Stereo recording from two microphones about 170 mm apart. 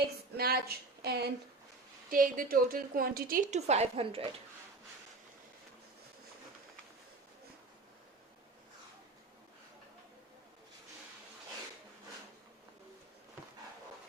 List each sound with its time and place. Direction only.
0.3 s a woman's voice: 65° right (ahead or behind)
2.0 s a woman's voice: 55° right (ahead or behind); by 4.3 s 35° right (ahead or behind)